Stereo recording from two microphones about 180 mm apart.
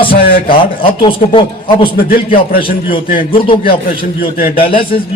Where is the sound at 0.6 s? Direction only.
30° left (ahead or behind).